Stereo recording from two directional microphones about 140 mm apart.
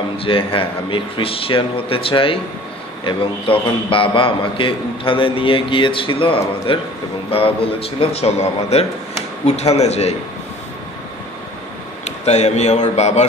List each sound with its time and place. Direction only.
0.2 s a man's voice: 40° left (ahead or behind)
12.0 s a man's voice: 50° left (ahead or behind)